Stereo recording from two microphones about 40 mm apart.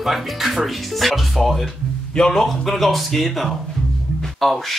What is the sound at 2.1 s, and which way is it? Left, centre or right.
Speech, centre.